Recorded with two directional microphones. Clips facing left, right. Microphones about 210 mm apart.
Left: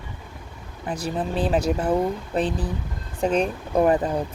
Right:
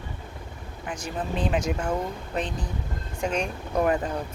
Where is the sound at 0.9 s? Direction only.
35° left (ahead or behind).